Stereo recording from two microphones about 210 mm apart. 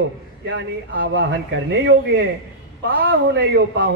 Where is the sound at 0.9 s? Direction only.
55° right (ahead or behind).